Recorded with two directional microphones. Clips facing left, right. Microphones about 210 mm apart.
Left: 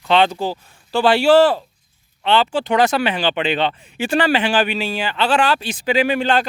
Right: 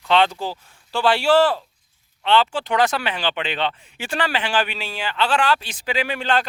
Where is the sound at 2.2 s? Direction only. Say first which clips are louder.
Left 2 dB; 5° left (ahead or behind).